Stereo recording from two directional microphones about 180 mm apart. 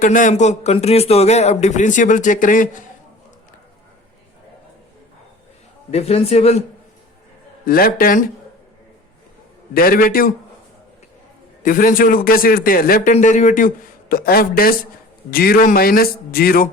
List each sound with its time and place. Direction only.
0.0 s speech: 45° left (ahead or behind)
5.9 s speech: 35° left (ahead or behind)
7.6 s a man's voice: 50° left (ahead or behind)
9.7 s a man's voice: 55° left (ahead or behind)
11.6 s a man's voice: 50° left (ahead or behind)
13.1 s a man's voice: 45° left (ahead or behind)